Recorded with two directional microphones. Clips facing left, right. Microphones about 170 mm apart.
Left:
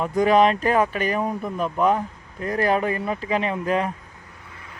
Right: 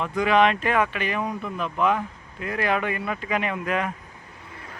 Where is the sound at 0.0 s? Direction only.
40° left (ahead or behind).